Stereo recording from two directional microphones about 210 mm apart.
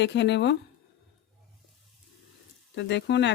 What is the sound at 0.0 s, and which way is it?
Speech, 55° left (ahead or behind).